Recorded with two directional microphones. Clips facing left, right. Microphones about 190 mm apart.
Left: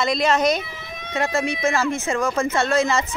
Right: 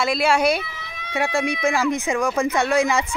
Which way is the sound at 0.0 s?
5° right (ahead or behind).